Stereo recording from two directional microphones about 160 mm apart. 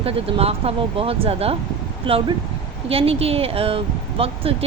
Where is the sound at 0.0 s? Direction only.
40° right (ahead or behind).